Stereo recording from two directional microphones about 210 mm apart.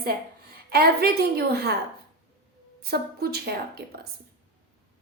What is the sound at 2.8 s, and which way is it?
A woman's voice, 50° right (ahead or behind).